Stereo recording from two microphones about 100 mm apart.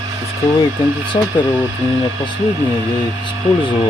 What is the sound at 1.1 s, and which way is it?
Speech, 60° left (ahead or behind).